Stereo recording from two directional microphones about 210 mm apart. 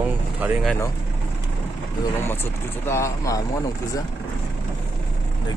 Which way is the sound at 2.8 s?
15° left (ahead or behind).